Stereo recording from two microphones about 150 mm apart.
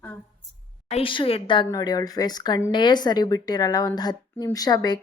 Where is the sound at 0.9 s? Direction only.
40° left (ahead or behind).